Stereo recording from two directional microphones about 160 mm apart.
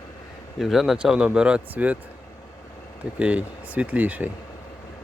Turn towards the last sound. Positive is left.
turn(degrees=-10)  # may be behind; listen again after turning